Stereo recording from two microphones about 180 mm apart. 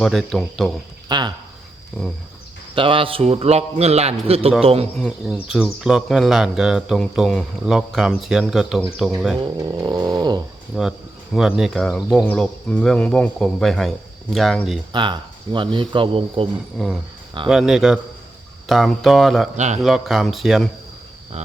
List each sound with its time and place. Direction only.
0.0 s speech: centre (ahead or behind)
1.0 s speech: 25° right (ahead or behind)
2.0 s speech: 5° left (ahead or behind)
2.7 s a man's voice: 30° right (ahead or behind)
4.9 s speech: centre (ahead or behind)
9.4 s speech: 20° right (ahead or behind)
10.7 s speech: centre (ahead or behind)
14.9 s speech: 25° right (ahead or behind)
16.7 s speech: centre (ahead or behind)
19.5 s a man's voice: 40° right (ahead or behind)
19.8 s speech: centre (ahead or behind)
21.3 s a man's voice: 35° right (ahead or behind)